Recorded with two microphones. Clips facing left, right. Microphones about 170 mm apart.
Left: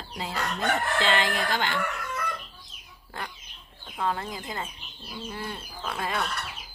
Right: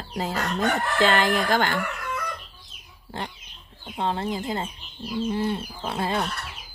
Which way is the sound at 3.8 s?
25° right (ahead or behind).